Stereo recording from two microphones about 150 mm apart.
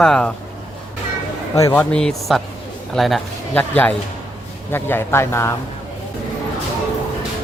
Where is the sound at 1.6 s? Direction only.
20° left (ahead or behind).